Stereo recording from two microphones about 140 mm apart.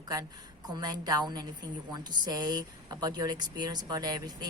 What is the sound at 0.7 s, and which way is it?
A woman's voice, 30° right (ahead or behind).